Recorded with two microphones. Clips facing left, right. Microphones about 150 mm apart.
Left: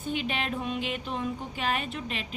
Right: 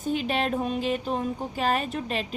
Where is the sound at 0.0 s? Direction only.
40° right (ahead or behind).